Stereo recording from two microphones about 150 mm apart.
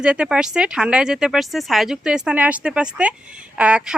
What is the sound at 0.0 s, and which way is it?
Speech, 5° right (ahead or behind).